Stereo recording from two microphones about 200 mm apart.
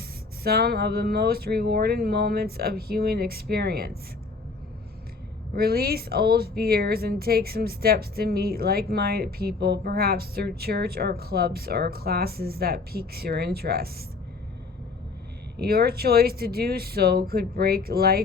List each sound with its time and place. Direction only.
0.4 s a woman's voice: 50° right (ahead or behind)
5.5 s a woman's voice: 50° right (ahead or behind)
15.5 s a woman's voice: 50° right (ahead or behind)